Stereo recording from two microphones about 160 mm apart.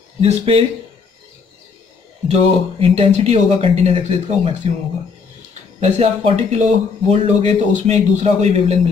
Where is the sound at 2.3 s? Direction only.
40° right (ahead or behind).